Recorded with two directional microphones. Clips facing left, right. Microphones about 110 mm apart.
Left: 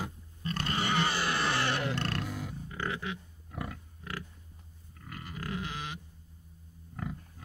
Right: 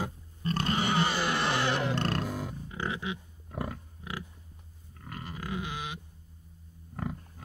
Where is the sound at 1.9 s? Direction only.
40° right (ahead or behind).